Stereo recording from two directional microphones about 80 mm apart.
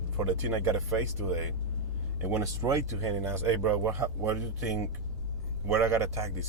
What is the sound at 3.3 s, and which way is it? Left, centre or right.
Speech, right.